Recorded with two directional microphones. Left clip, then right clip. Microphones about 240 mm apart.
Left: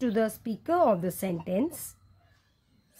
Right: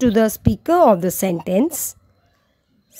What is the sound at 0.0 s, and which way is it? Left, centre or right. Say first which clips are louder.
A woman's voice: right 11 dB; right.